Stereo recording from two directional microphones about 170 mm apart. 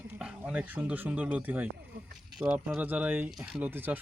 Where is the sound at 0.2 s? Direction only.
5° right (ahead or behind).